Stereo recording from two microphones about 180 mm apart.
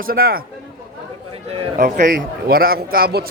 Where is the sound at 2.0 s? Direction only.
50° right (ahead or behind).